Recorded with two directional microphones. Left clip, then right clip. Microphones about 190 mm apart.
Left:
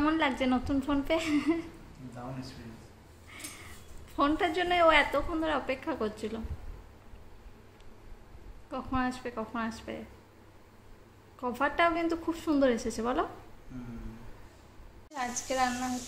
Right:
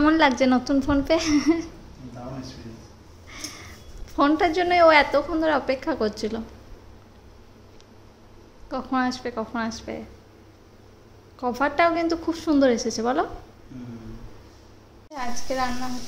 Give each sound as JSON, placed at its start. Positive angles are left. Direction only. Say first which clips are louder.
{"t": 0.0, "sound": "a woman's voice", "louder": "right 10 dB", "side_deg": -15}
{"t": 3.3, "sound": "a sound", "louder": "right 8 dB", "side_deg": -20}
{"t": 4.2, "sound": "a woman's voice", "louder": "right 8 dB", "side_deg": -10}
{"t": 8.6, "sound": "a woman's voice", "louder": "right 7 dB", "side_deg": -10}
{"t": 11.3, "sound": "a woman's voice", "louder": "right 7 dB", "side_deg": -5}
{"t": 15.1, "sound": "a woman's voice", "louder": "right 3 dB", "side_deg": -5}